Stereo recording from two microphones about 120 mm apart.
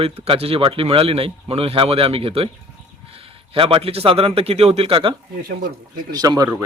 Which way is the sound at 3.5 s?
50° right (ahead or behind).